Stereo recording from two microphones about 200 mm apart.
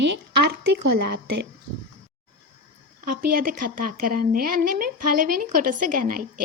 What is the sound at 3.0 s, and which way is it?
Speech, 45° right (ahead or behind).